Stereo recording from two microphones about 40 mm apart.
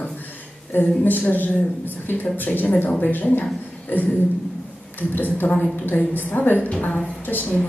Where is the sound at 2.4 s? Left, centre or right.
Left.